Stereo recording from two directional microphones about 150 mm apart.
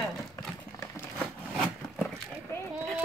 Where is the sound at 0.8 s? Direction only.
15° left (ahead or behind).